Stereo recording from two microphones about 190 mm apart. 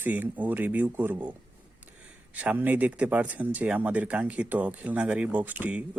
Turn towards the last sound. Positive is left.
turn(degrees=-10)  # may be behind; listen again after turning